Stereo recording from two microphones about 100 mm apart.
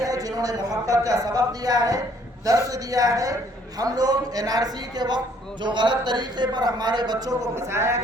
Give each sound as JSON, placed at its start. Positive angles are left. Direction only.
{"t": 0.0, "sound": "speech", "side_deg": -35}
{"t": 7.5, "sound": "a man's voice", "side_deg": -25}